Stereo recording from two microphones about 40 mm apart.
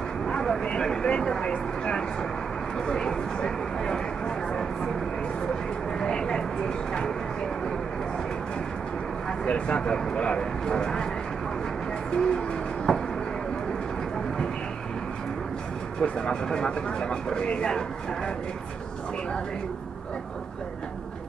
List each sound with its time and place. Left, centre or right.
0.4 s vehicle: centre
0.7 s a sound: centre
1.0 s speech: left
1.4 s vehicle: left
2.9 s a sound: centre
5.9 s a sound: left
9.4 s speech: left
12.2 s owl: centre
16.0 s speech: centre